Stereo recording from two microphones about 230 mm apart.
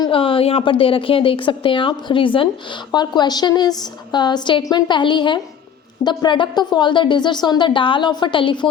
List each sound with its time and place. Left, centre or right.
0.0 s a woman's voice: left